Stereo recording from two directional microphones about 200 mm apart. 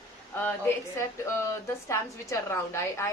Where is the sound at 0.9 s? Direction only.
15° left (ahead or behind).